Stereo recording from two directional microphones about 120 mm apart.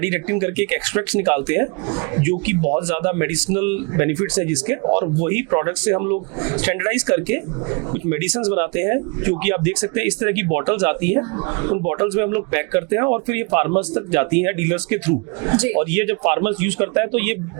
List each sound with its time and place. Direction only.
0.0 s speech: 20° right (ahead or behind)